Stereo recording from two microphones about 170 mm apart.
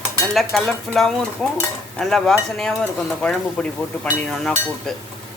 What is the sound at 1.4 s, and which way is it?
Stir, 5° left (ahead or behind).